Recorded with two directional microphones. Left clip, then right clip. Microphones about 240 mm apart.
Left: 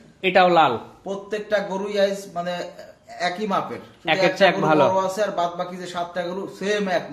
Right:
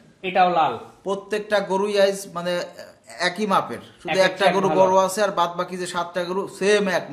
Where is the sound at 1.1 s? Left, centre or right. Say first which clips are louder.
Right 2 dB; right.